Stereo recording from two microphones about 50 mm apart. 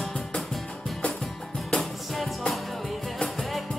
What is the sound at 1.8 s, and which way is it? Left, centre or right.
Music, centre.